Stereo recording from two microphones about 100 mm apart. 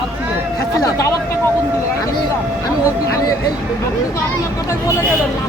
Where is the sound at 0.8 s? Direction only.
35° left (ahead or behind).